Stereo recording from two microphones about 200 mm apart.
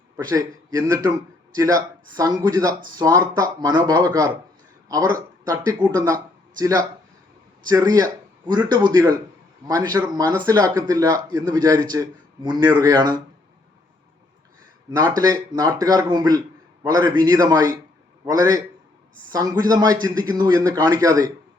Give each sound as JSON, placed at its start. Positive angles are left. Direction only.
{"t": 0.2, "sound": "speech", "side_deg": -20}
{"t": 14.8, "sound": "speech", "side_deg": -20}